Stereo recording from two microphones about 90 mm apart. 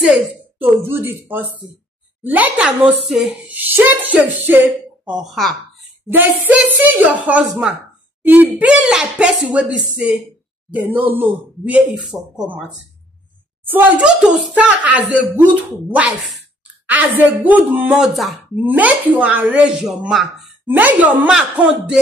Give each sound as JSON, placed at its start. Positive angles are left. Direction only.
{"t": 0.6, "sound": "a woman's voice", "side_deg": -25}
{"t": 3.4, "sound": "a woman's voice", "side_deg": -20}
{"t": 5.1, "sound": "speech", "side_deg": 0}
{"t": 6.0, "sound": "a woman's voice", "side_deg": -20}
{"t": 12.1, "sound": "speech", "side_deg": -5}
{"t": 13.7, "sound": "a woman's voice", "side_deg": -20}
{"t": 14.0, "sound": "a woman's voice", "side_deg": -10}
{"t": 18.0, "sound": "speech", "side_deg": 0}
{"t": 18.6, "sound": "speech", "side_deg": -20}
{"t": 20.7, "sound": "a woman's voice", "side_deg": -20}
{"t": 21.3, "sound": "speech", "side_deg": -10}